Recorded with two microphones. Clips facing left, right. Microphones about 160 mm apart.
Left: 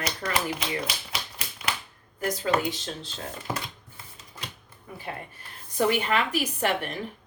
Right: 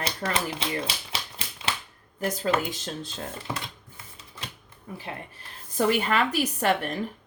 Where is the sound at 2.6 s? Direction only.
45° right (ahead or behind).